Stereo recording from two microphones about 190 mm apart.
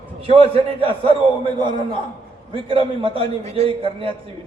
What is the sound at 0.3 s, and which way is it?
Speech, 30° right (ahead or behind).